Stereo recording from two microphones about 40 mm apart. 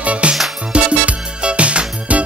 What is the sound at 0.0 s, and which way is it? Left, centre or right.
Music, right.